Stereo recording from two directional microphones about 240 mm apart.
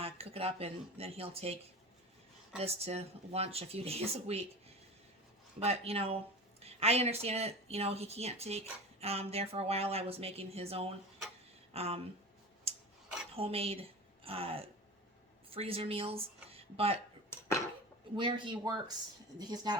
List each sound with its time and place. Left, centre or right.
0.0 s speech: right
2.6 s speech: right
5.5 s speech: right
12.7 s rub: right
13.3 s speech: right
17.2 s a sound: centre
18.2 s speech: centre